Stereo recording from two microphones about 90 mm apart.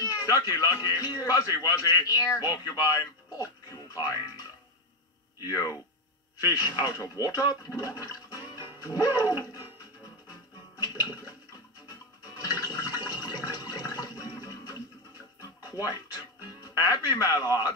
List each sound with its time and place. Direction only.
0.0 s a man's voice: 40° left (ahead or behind)
5.5 s a man's voice: 45° left (ahead or behind)
8.5 s music: 45° left (ahead or behind)
12.4 s toilet flush: 40° left (ahead or behind)
12.7 s water: 45° left (ahead or behind)
14.4 s music: 45° left (ahead or behind)
15.7 s a man's voice: 45° left (ahead or behind)